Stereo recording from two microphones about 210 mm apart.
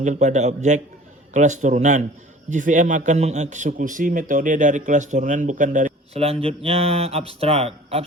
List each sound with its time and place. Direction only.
0.0 s a man's voice: 35° right (ahead or behind)